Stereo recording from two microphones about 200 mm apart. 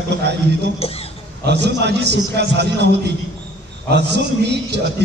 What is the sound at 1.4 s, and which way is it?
A man's voice, 55° right (ahead or behind).